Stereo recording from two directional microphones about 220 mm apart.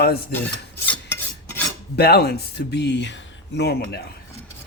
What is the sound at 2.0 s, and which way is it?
Speech, 45° left (ahead or behind).